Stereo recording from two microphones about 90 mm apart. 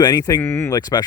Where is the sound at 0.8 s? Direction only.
45° left (ahead or behind).